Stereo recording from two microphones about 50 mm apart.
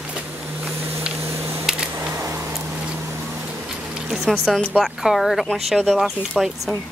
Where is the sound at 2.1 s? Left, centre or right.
Right.